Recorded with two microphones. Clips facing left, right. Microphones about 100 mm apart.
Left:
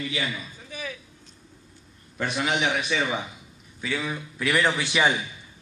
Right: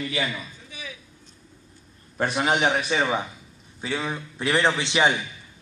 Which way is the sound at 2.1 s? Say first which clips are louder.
Right 3 dB; 40° right (ahead or behind).